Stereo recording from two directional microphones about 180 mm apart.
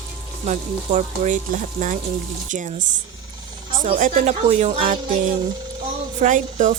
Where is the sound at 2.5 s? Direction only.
45° right (ahead or behind).